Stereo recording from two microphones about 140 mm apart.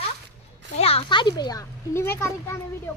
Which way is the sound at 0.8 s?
45° left (ahead or behind).